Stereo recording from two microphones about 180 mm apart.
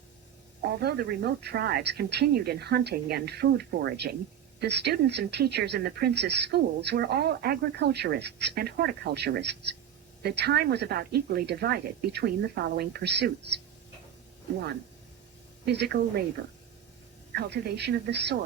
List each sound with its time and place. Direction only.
0.6 s speech: 65° right (ahead or behind)
15.6 s speech: 65° right (ahead or behind)
17.3 s speech: 65° right (ahead or behind)